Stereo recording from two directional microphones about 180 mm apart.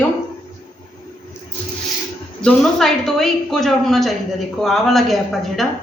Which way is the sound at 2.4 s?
5° left (ahead or behind).